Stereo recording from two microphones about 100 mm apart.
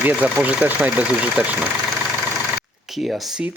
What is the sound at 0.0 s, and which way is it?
Speech, 15° right (ahead or behind).